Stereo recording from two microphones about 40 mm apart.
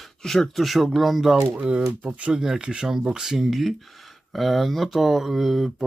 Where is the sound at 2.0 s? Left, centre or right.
Right.